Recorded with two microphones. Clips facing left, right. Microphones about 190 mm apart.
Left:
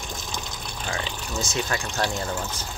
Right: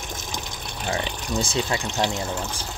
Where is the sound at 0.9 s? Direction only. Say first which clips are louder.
Right 5 dB; 25° right (ahead or behind).